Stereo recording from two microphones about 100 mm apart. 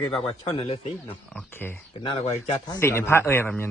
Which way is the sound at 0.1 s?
75° left (ahead or behind).